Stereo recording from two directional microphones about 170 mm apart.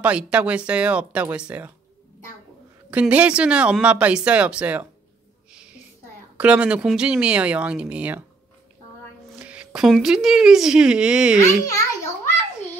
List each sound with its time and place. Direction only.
0.0 s speech: 5° right (ahead or behind)
2.9 s speech: 10° right (ahead or behind)
6.3 s speech: 10° right (ahead or behind)
9.3 s speech: 5° right (ahead or behind)
11.3 s a child's voice: 20° left (ahead or behind)